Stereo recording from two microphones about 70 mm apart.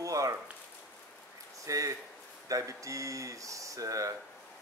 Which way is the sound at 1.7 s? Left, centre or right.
Right.